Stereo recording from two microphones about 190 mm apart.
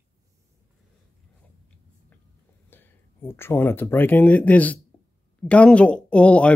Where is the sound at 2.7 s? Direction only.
10° left (ahead or behind).